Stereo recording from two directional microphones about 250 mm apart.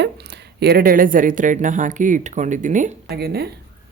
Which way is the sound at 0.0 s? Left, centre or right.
Right.